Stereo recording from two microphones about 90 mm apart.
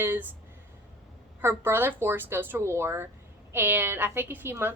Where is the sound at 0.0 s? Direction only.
25° right (ahead or behind).